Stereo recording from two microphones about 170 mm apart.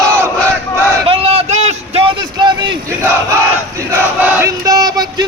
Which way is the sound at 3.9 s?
10° right (ahead or behind).